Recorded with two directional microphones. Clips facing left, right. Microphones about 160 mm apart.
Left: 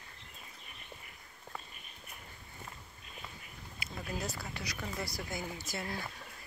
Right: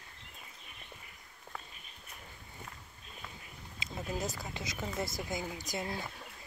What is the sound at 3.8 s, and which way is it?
Speech, 20° right (ahead or behind).